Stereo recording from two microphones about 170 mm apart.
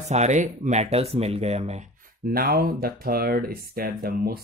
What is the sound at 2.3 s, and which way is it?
Speech, 60° right (ahead or behind).